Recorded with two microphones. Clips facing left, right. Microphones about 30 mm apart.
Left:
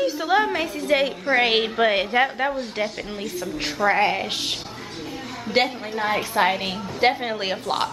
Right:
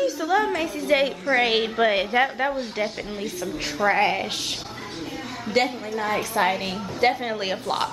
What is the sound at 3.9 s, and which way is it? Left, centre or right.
Speech, centre.